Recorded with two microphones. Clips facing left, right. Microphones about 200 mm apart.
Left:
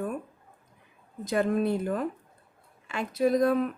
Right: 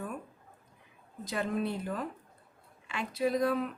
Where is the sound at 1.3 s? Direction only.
50° left (ahead or behind).